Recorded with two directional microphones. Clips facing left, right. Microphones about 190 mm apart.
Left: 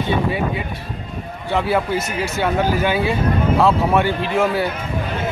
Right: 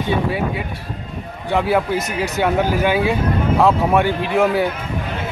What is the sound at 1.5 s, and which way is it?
Speech, 15° right (ahead or behind).